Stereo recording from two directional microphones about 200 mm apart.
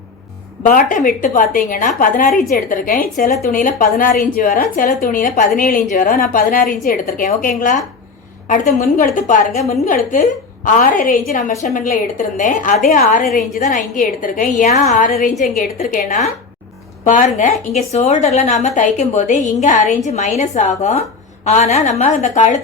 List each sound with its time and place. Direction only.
0.6 s a woman's voice: 40° left (ahead or behind)
9.0 s a woman's voice: 40° left (ahead or behind)